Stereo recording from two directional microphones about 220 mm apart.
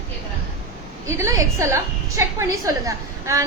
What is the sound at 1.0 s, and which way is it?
A woman's voice, 15° right (ahead or behind).